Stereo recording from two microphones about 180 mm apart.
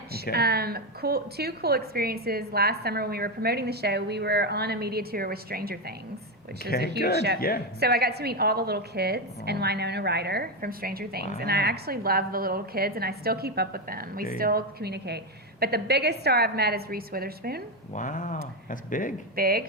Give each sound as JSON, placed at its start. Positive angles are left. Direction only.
{"t": 0.3, "sound": "a woman's voice", "side_deg": -60}
{"t": 6.6, "sound": "speech", "side_deg": 60}
{"t": 7.8, "sound": "a woman's voice", "side_deg": -60}
{"t": 17.9, "sound": "speech", "side_deg": 45}
{"t": 19.4, "sound": "a woman's voice", "side_deg": -55}